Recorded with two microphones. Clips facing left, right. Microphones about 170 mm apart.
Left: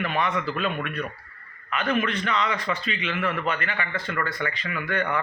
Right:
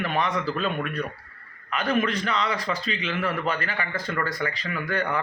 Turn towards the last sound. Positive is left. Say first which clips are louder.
# even
turn(degrees=-35)  # may be behind; listen again after turning